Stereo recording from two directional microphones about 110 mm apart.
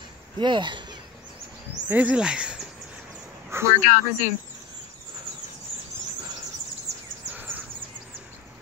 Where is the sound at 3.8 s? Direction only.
90° left.